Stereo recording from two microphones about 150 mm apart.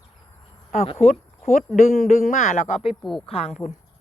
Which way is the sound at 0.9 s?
45° left (ahead or behind).